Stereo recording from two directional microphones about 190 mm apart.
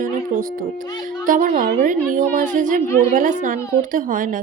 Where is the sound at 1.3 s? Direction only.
40° right (ahead or behind).